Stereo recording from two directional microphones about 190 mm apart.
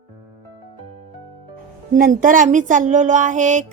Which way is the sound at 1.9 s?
45° right (ahead or behind).